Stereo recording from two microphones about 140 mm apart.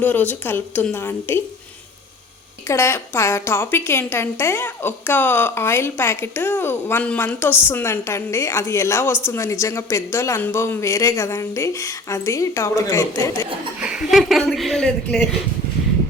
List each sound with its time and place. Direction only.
0.0 s a woman's voice: 10° left (ahead or behind)
2.6 s a woman's voice: 20° left (ahead or behind)
13.7 s speech: 5° right (ahead or behind)